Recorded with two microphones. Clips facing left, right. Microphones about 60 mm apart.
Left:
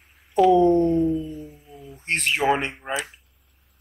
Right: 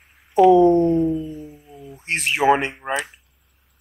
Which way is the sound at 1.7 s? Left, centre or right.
Right.